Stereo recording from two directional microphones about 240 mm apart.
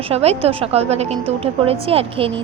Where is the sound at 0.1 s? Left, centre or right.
Right.